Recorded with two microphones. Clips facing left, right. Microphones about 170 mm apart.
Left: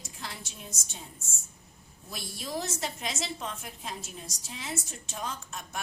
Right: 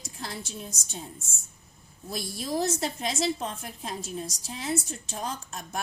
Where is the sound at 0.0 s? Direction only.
40° right (ahead or behind).